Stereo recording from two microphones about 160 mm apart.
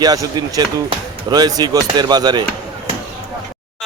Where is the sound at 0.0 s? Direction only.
25° right (ahead or behind).